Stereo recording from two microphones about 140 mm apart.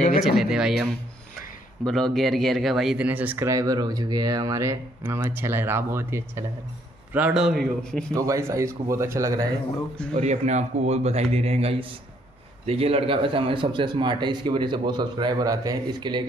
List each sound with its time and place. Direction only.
0.4 s speech: 5° right (ahead or behind)
1.9 s speech: 5° left (ahead or behind)
3.4 s speech: 25° right (ahead or behind); by 8.0 s centre (ahead or behind)
8.1 s speech: 20° right (ahead or behind)
10.1 s a man's voice: 55° right (ahead or behind); by 16.3 s 30° right (ahead or behind)